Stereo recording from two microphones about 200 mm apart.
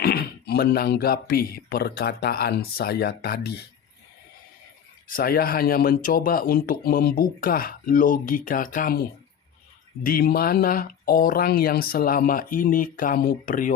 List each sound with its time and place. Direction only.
0.0 s speech: 50° left (ahead or behind)
5.0 s speech: 45° left (ahead or behind)